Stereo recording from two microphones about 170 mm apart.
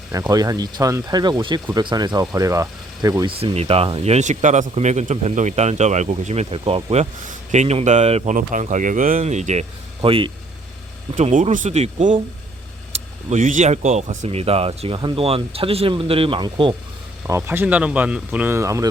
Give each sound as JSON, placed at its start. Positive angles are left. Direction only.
{"t": 0.1, "sound": "speech", "side_deg": -20}
{"t": 3.4, "sound": "speech", "side_deg": -35}
{"t": 8.4, "sound": "speech", "side_deg": -50}
{"t": 11.1, "sound": "speech", "side_deg": -50}
{"t": 17.2, "sound": "speech", "side_deg": -15}